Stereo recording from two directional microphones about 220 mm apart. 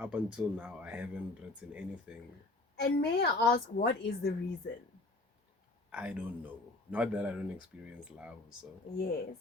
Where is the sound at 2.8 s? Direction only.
45° left (ahead or behind).